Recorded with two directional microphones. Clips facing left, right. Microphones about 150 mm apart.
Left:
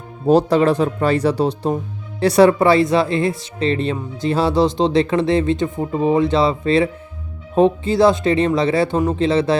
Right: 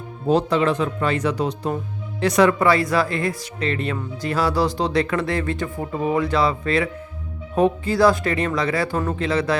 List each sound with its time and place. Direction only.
0.3 s speech: 40° left (ahead or behind)